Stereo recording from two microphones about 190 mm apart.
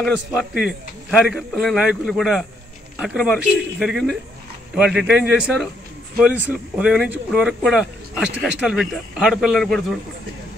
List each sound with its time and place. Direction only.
0.0 s speech: centre (ahead or behind)